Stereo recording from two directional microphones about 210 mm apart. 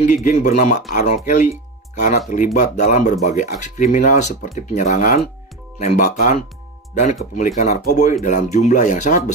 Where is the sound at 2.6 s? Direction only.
35° left (ahead or behind).